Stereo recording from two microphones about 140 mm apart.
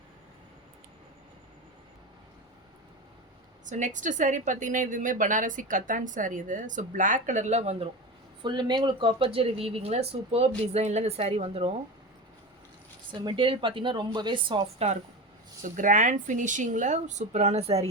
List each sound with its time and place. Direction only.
3.7 s a woman's voice: 65° right (ahead or behind)
8.4 s a woman's voice: 35° right (ahead or behind)
13.1 s speech: 35° right (ahead or behind)
15.7 s a woman's voice: 65° right (ahead or behind); by 17.8 s 50° right (ahead or behind)